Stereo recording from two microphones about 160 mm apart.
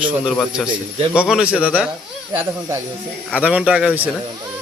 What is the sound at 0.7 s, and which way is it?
Speech, 35° right (ahead or behind).